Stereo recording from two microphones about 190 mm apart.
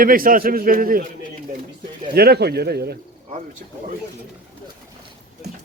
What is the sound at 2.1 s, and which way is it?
Speech, 60° right (ahead or behind).